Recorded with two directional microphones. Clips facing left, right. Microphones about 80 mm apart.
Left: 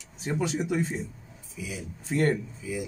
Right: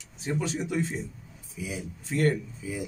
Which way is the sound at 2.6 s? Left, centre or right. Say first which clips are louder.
Left 2 dB; right.